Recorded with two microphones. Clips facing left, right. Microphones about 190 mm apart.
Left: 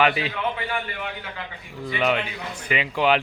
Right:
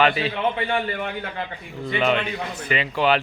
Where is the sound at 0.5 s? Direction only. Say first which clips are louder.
Right 5 dB; 30° right (ahead or behind).